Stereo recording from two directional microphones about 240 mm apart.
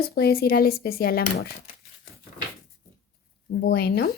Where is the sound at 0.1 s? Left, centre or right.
Left.